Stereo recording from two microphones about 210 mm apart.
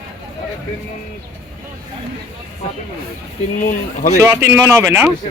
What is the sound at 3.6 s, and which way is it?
Speech, 40° left (ahead or behind).